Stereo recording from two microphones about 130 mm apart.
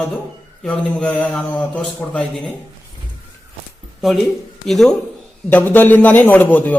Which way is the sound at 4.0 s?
Centre (ahead or behind).